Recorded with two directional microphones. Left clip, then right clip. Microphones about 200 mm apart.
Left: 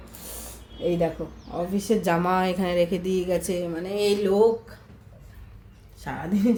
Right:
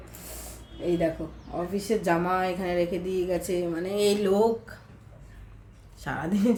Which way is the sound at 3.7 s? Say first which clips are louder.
Left 1 dB; centre (ahead or behind).